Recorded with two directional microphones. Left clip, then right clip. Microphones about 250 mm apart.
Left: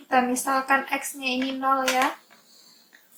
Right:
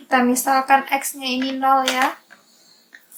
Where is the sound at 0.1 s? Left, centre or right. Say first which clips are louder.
Right 5 dB; right.